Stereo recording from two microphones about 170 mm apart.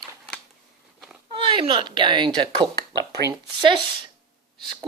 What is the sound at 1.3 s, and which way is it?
Speech, 30° right (ahead or behind).